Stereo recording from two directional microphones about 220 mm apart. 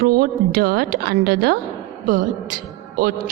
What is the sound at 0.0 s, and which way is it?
A man's voice, 40° right (ahead or behind).